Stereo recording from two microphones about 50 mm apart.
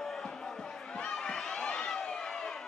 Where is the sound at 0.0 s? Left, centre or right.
Centre.